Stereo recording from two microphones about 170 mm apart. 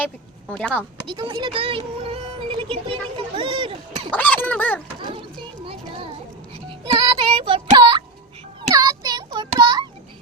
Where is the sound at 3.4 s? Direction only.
30° right (ahead or behind).